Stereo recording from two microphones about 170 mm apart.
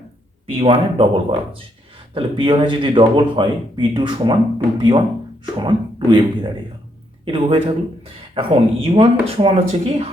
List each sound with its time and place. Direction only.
0.6 s speech: 35° right (ahead or behind)